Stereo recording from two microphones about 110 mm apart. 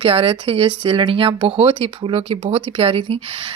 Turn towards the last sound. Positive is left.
turn(degrees=-55)  # may be behind; listen again after turning